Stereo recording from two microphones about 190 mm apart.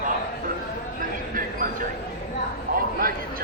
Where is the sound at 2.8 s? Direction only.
50° right (ahead or behind).